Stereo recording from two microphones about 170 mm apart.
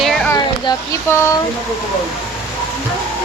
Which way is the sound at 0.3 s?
25° left (ahead or behind).